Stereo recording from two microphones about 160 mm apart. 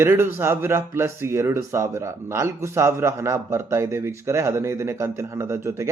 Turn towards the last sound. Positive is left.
turn(degrees=-15)  # may be behind; listen again after turning